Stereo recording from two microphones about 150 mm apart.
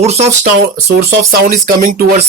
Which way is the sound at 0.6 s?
85° right.